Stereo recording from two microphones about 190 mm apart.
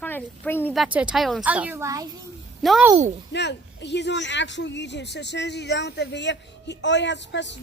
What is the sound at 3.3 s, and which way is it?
Speech, 65° left (ahead or behind).